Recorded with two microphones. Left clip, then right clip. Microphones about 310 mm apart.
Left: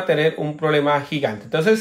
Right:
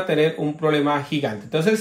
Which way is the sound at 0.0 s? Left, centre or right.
Left.